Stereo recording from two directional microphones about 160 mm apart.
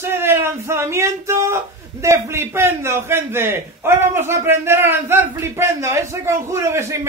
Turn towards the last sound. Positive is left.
turn(degrees=-15)  # may be behind; listen again after turning